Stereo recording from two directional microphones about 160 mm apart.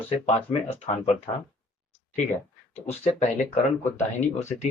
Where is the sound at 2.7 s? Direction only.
40° left (ahead or behind).